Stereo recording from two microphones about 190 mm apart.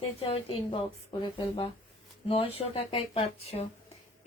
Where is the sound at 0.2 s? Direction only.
30° left (ahead or behind).